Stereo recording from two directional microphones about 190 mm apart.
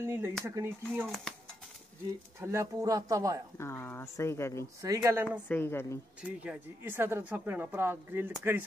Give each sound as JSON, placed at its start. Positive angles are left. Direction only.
{"t": 0.0, "sound": "speech", "side_deg": -15}
{"t": 2.4, "sound": "speech", "side_deg": -15}
{"t": 3.5, "sound": "speech", "side_deg": 15}
{"t": 4.8, "sound": "speech", "side_deg": -15}
{"t": 5.5, "sound": "speech", "side_deg": 10}
{"t": 6.4, "sound": "speech", "side_deg": -10}